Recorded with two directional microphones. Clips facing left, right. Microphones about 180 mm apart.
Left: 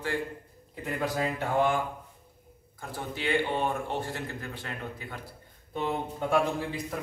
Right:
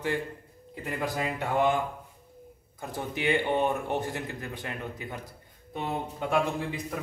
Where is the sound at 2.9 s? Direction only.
20° right (ahead or behind).